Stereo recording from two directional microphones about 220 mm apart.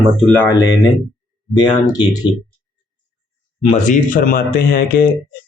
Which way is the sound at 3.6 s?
30° left (ahead or behind).